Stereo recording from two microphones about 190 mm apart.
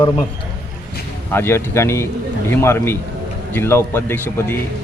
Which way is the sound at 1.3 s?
15° left (ahead or behind).